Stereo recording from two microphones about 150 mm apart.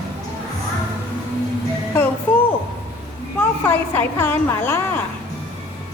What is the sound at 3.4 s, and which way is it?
A woman's voice, 15° left (ahead or behind).